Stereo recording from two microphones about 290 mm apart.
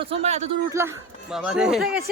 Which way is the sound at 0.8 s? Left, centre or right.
Centre.